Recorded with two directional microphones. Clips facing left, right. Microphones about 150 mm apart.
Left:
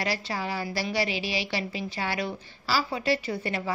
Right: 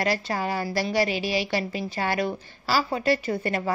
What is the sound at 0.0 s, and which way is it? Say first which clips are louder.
A woman's voice: right 4 dB; 50° right (ahead or behind).